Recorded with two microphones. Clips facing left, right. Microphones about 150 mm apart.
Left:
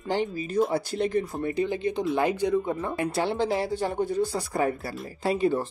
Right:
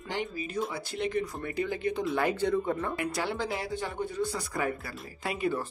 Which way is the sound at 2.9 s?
25° left (ahead or behind).